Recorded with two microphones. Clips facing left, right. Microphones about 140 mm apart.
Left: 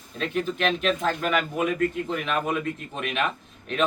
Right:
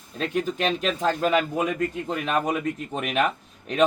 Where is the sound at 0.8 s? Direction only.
35° right (ahead or behind).